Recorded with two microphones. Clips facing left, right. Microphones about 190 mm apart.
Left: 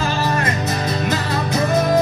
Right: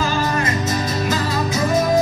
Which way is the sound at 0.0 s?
60° left (ahead or behind).